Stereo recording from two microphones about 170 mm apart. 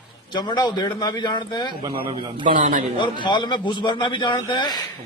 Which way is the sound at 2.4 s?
50° right (ahead or behind).